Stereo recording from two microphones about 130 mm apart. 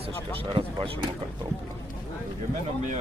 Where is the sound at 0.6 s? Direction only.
40° right (ahead or behind).